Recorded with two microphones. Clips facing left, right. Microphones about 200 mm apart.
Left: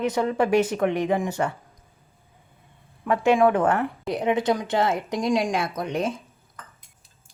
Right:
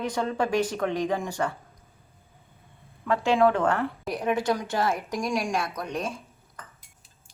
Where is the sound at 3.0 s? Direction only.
20° left (ahead or behind).